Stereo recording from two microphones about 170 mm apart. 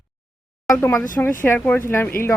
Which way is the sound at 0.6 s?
10° left (ahead or behind).